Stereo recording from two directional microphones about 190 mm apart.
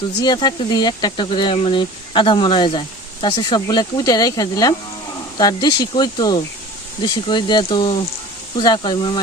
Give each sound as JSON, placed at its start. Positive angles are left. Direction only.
{"t": 0.2, "sound": "speech", "side_deg": 25}